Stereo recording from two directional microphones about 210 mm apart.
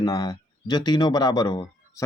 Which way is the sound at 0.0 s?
15° left (ahead or behind).